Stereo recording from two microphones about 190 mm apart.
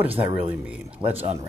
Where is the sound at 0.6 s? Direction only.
5° right (ahead or behind).